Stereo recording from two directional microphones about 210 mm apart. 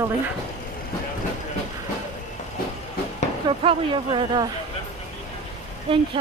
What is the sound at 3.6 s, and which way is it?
Speech, 25° right (ahead or behind).